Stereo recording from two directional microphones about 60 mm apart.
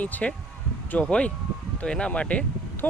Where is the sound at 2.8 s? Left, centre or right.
Left.